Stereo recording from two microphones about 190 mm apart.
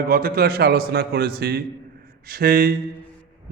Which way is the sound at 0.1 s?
50° right (ahead or behind).